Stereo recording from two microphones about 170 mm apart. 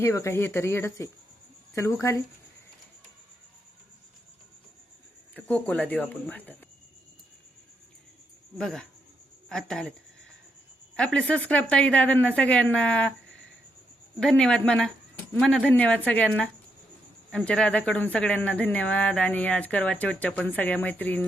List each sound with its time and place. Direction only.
0.0 s speech: 15° left (ahead or behind)
5.6 s speech: 10° left (ahead or behind)
8.5 s speech: 5° left (ahead or behind)
10.9 s speech: 5° left (ahead or behind)
14.2 s speech: 5° left (ahead or behind)